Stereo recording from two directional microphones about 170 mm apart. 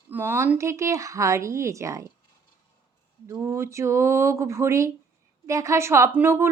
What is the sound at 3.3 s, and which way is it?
Speech, 15° right (ahead or behind).